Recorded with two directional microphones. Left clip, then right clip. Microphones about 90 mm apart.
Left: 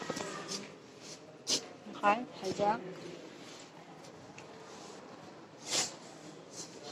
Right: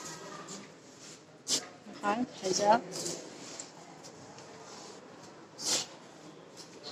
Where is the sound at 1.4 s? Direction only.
35° right (ahead or behind).